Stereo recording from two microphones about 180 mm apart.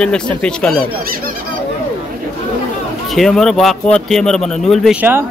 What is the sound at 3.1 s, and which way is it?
Speech, centre (ahead or behind).